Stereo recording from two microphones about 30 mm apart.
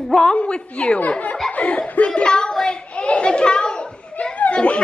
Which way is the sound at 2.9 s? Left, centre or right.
Left.